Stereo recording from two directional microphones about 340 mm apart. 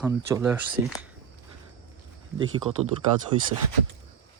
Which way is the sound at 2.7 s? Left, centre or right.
Centre.